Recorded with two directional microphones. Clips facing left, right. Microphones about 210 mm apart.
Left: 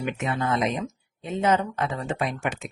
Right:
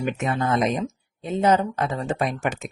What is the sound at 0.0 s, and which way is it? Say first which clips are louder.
Speech: right 3 dB; 45° right (ahead or behind).